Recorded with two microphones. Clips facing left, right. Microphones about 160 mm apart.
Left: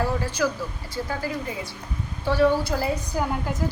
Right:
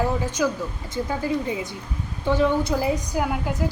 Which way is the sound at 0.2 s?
20° right (ahead or behind).